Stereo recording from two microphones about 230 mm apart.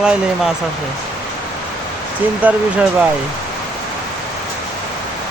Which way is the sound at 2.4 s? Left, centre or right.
Centre.